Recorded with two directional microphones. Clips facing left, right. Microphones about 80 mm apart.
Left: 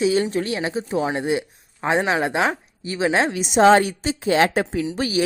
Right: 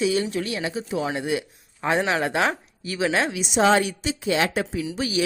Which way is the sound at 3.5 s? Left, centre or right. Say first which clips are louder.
Left 5 dB; left.